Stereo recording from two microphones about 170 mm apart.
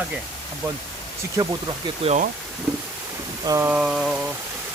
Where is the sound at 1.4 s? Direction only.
20° right (ahead or behind).